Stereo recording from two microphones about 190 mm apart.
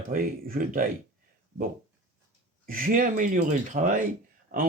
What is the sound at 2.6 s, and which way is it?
Speech, 45° right (ahead or behind).